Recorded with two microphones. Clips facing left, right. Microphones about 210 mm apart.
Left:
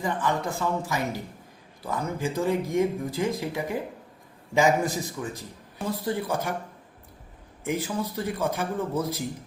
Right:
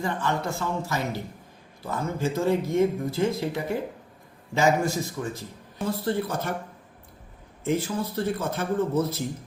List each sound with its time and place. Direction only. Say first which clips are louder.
0.0 s speech: even; 15° left (ahead or behind)
7.6 s speech: right 2 dB; 15° left (ahead or behind)